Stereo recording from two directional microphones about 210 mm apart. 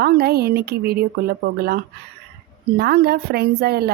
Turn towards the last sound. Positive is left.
turn(degrees=-50)  # may be behind; listen again after turning